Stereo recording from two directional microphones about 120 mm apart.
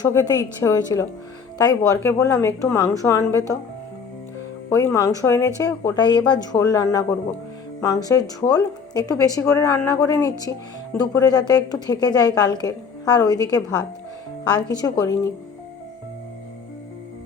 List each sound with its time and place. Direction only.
0.0 s a woman's voice: 30° left (ahead or behind)
4.7 s a woman's voice: 25° left (ahead or behind)